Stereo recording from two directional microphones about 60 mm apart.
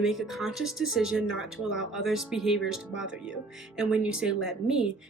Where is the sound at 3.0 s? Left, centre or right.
Centre.